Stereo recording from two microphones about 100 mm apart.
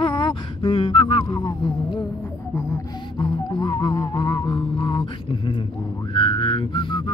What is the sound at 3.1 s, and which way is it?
Music, 50° left (ahead or behind).